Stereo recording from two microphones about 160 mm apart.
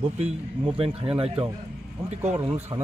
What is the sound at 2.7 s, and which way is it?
Speech, 25° right (ahead or behind).